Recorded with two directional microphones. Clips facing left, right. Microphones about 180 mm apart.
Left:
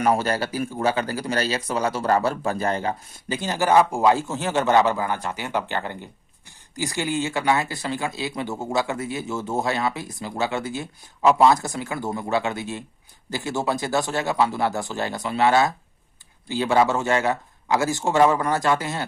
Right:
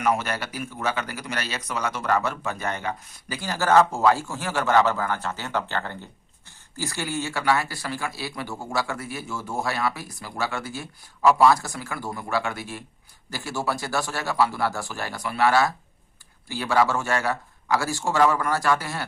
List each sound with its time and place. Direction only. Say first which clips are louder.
0.0 s speech: left 4 dB; 30° left (ahead or behind)